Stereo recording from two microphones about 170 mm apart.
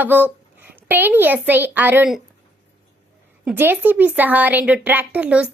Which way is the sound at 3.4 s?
10° right (ahead or behind).